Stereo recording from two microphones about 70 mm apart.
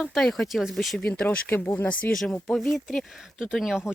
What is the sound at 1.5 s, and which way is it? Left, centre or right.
Speech, left.